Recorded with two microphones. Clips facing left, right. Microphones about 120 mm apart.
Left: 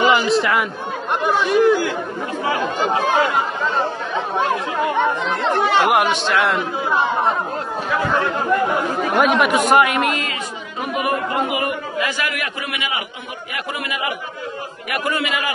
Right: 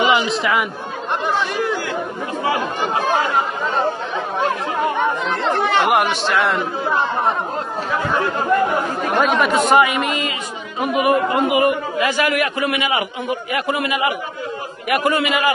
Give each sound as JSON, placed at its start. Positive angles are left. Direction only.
{"t": 0.0, "sound": "a man's voice", "side_deg": 0}
{"t": 1.2, "sound": "speech", "side_deg": 15}
{"t": 5.3, "sound": "speech", "side_deg": 0}
{"t": 8.1, "sound": "speech", "side_deg": -10}
{"t": 9.0, "sound": "speech", "side_deg": 0}
{"t": 11.5, "sound": "speech", "side_deg": -20}
{"t": 12.5, "sound": "a man's voice", "side_deg": -35}
{"t": 13.7, "sound": "speech", "side_deg": -25}